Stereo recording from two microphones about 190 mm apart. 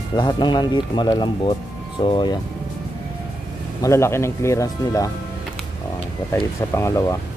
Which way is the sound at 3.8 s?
15° left (ahead or behind).